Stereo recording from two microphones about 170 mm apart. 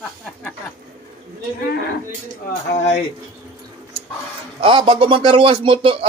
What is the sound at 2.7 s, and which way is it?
Speech, 40° left (ahead or behind).